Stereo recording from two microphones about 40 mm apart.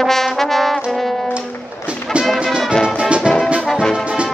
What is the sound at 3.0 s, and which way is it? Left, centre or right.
Music, right.